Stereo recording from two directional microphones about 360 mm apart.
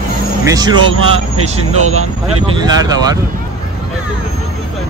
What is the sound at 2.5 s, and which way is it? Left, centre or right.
Speech, centre.